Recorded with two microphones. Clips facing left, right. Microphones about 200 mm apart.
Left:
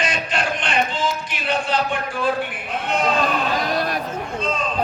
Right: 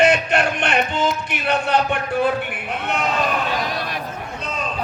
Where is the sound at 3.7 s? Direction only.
45° left (ahead or behind).